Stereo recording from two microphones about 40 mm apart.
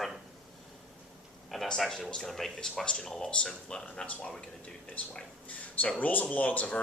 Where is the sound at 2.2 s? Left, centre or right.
Centre.